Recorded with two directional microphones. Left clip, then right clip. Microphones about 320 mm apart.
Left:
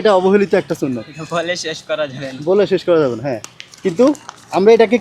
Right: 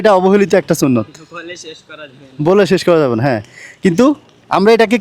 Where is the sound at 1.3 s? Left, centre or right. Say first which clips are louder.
Left 9 dB; left.